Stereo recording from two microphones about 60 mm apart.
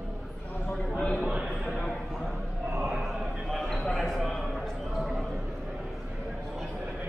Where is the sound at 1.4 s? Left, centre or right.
Centre.